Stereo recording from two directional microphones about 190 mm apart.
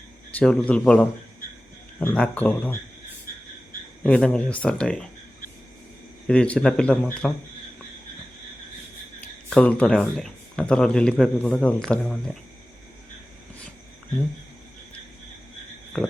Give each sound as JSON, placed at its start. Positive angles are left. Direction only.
{"t": 0.3, "sound": "a sound", "side_deg": 5}
{"t": 0.7, "sound": "speech", "side_deg": 5}
{"t": 4.0, "sound": "speech", "side_deg": 5}
{"t": 6.2, "sound": "speech", "side_deg": 5}
{"t": 9.2, "sound": "speech", "side_deg": 5}
{"t": 15.9, "sound": "frog", "side_deg": 0}